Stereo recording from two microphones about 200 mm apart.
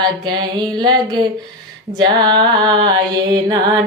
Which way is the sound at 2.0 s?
20° right (ahead or behind).